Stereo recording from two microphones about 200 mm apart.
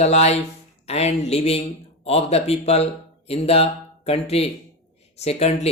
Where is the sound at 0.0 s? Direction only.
35° left (ahead or behind).